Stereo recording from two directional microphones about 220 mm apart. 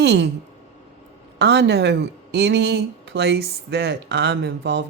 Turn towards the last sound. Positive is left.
turn(degrees=-50)  # may be behind; listen again after turning